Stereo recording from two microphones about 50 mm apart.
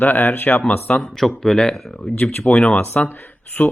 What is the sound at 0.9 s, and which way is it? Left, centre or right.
Speech, left.